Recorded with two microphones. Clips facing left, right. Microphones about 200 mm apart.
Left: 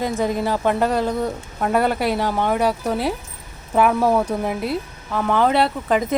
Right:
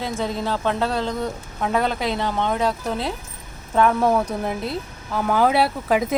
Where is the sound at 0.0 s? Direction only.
15° left (ahead or behind).